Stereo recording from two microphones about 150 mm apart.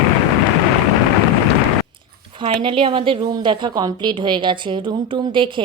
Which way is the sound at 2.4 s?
35° right (ahead or behind).